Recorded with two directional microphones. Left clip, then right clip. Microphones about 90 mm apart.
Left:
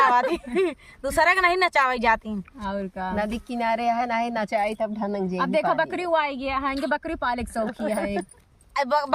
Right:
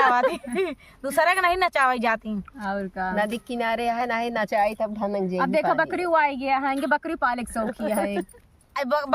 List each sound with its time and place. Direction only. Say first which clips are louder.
0.0 s a woman's voice: even; 40° left (ahead or behind)
2.6 s a woman's voice: right 2 dB; 5° right (ahead or behind)
3.2 s speech: right 1 dB; 50° right (ahead or behind)
5.4 s a woman's voice: even; 5° right (ahead or behind)
6.8 s speech: right 2 dB; 15° right (ahead or behind)
8.7 s speech: left 2 dB; 35° left (ahead or behind)